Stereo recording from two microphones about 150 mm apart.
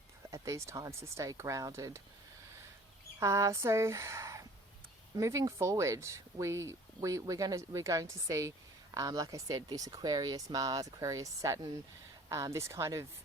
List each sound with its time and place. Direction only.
0.3 s speech: 20° right (ahead or behind)
3.2 s speech: 20° right (ahead or behind)